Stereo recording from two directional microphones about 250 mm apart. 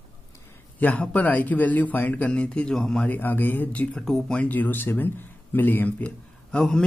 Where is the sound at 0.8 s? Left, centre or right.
Centre.